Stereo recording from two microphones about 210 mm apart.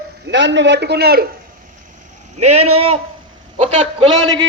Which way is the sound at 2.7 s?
25° right (ahead or behind).